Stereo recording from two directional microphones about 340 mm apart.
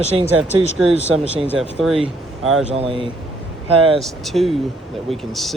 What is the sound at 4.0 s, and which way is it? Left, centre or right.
Speech, centre.